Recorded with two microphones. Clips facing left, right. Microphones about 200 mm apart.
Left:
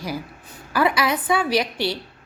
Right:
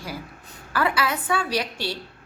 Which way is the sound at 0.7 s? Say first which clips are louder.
Left 4 dB; 15° left (ahead or behind).